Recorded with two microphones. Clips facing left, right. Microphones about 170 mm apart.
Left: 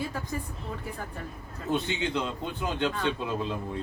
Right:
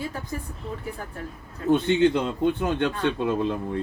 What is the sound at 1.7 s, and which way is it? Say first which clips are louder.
A man's voice: right 9 dB; 55° right (ahead or behind).